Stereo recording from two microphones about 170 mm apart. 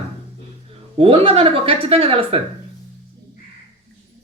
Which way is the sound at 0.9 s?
35° right (ahead or behind).